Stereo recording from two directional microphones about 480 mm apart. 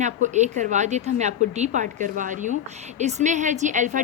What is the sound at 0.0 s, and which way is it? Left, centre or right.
A woman's voice, centre.